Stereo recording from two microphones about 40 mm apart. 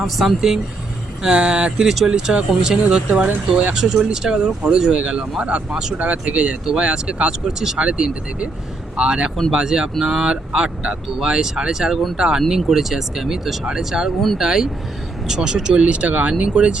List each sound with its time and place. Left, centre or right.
0.0 s speech: centre
1.2 s speech: right
1.8 s speech: centre
2.0 s speech: right
7.3 s speech: centre
7.8 s speech: right; by 13.6 s centre
13.7 s speech: centre